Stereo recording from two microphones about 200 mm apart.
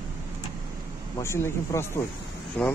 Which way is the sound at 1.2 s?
15° left (ahead or behind).